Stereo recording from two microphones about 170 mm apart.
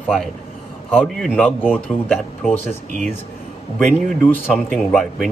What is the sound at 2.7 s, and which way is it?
Speech, 45° right (ahead or behind).